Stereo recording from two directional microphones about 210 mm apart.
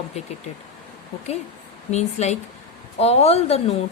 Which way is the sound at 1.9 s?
30° left (ahead or behind).